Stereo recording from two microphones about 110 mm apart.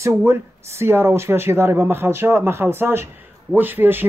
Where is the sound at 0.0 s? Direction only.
25° right (ahead or behind).